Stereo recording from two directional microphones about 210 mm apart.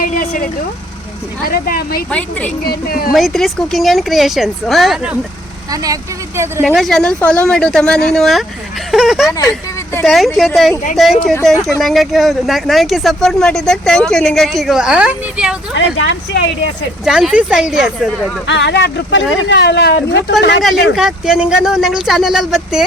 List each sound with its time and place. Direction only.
0.0 s vehicle: 40° left (ahead or behind)
1.5 s speech: 45° left (ahead or behind)
2.0 s speech: 5° left (ahead or behind)
2.6 s speech: 45° left (ahead or behind)
3.1 s speech: centre (ahead or behind)
5.7 s speech: 15° right (ahead or behind)
6.7 s speech: centre (ahead or behind)
16.0 s speech: 60° left (ahead or behind)
17.1 s speech: 5° right (ahead or behind)
18.4 s speech: 55° left (ahead or behind)
20.9 s speech: 5° right (ahead or behind)